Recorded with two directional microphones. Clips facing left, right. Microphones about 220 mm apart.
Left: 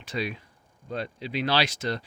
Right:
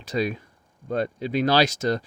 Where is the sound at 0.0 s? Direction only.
40° right (ahead or behind).